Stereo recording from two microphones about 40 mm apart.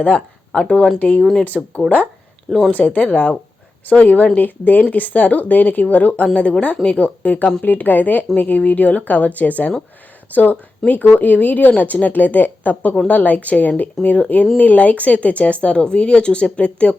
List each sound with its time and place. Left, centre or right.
0.1 s speech: left
0.9 s a woman's voice: left
2.5 s speech: centre
2.7 s speech: left
6.2 s a woman's voice: left
7.6 s a woman's voice: left